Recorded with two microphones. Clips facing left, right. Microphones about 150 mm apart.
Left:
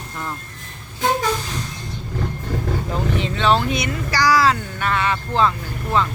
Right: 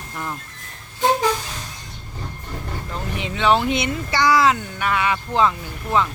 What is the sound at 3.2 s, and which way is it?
Speech, 15° right (ahead or behind).